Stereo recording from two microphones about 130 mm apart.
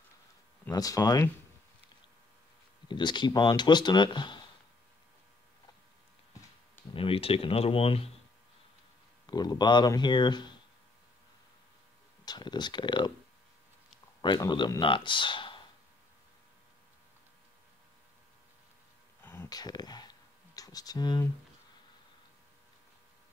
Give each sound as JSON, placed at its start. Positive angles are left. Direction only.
{"t": 0.7, "sound": "speech", "side_deg": 25}
{"t": 2.9, "sound": "speech", "side_deg": 35}
{"t": 6.9, "sound": "speech", "side_deg": 45}
{"t": 9.2, "sound": "speech", "side_deg": 30}
{"t": 12.3, "sound": "speech", "side_deg": 35}
{"t": 14.2, "sound": "speech", "side_deg": 35}
{"t": 19.2, "sound": "a sound", "side_deg": 15}
{"t": 19.5, "sound": "a sound", "side_deg": 30}
{"t": 20.5, "sound": "speech", "side_deg": 30}